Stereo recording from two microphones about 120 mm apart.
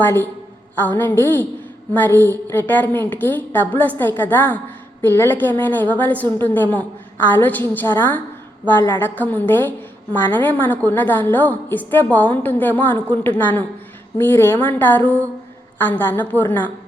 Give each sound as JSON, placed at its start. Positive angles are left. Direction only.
{"t": 0.0, "sound": "a woman's voice", "side_deg": 20}